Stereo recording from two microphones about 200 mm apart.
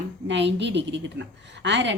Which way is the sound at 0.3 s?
60° right (ahead or behind).